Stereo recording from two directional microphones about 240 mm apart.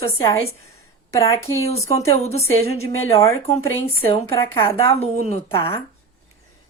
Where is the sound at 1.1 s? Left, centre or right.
Centre.